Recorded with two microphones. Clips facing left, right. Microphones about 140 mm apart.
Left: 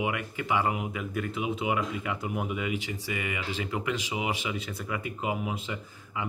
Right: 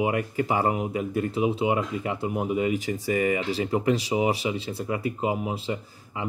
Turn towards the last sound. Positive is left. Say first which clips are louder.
# right 2 dB
turn(degrees=-30)  # may be behind; listen again after turning